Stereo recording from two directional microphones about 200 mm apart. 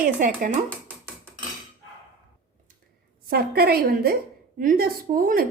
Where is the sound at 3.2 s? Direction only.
50° right (ahead or behind).